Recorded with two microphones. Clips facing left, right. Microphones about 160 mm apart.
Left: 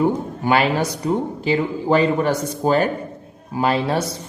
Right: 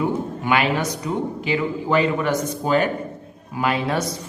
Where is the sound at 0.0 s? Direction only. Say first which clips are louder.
Left 3 dB; 35° left (ahead or behind).